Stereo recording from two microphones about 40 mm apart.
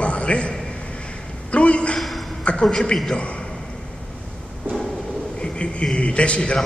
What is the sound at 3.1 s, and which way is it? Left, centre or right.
Speech, left.